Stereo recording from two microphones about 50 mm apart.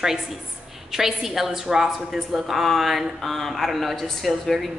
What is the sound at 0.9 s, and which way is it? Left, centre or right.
A woman's voice, centre.